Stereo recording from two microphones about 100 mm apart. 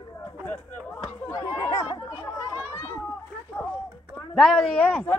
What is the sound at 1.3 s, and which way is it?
Chatter, 35° left (ahead or behind).